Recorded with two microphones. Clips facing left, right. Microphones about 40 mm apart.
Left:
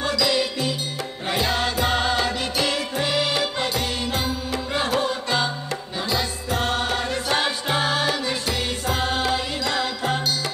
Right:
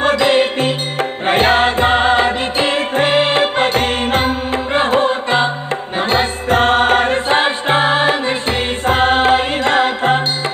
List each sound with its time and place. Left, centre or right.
0.0 s music: right